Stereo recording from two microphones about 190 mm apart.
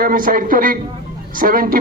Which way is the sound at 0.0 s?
50° right (ahead or behind).